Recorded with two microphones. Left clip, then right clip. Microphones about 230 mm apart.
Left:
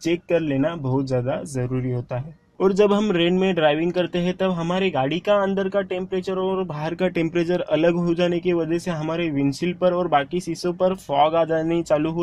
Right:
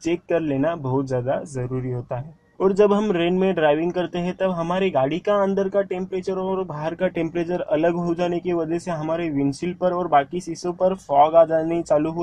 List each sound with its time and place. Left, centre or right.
0.0 s speech: left
2.6 s speech: left
4.7 s speech: left